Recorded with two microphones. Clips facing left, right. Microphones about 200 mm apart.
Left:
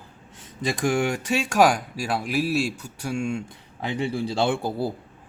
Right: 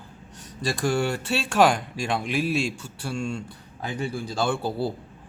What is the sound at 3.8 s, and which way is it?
Speech, 25° left (ahead or behind).